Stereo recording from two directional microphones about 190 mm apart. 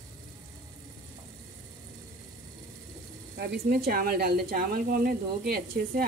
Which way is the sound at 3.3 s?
55° right (ahead or behind).